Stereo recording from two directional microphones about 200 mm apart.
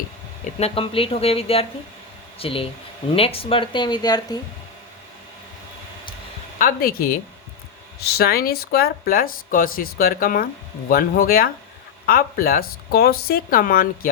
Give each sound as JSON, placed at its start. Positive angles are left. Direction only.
{"t": 0.6, "sound": "speech", "side_deg": 30}
{"t": 6.6, "sound": "speech", "side_deg": 45}